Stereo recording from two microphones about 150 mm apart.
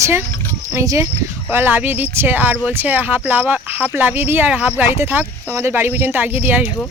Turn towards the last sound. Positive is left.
turn(degrees=-10)  # may be behind; listen again after turning